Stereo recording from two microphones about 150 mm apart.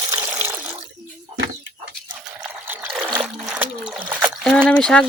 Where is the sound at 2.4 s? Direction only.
10° right (ahead or behind).